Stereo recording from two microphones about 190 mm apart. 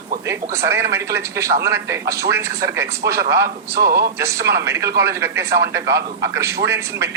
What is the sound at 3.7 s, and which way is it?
Speech, 55° right (ahead or behind).